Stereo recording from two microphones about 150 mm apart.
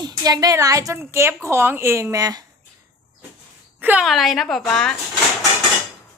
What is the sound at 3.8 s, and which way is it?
Speech, 10° right (ahead or behind).